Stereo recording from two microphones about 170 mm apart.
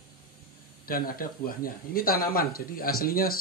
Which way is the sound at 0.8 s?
60° left (ahead or behind).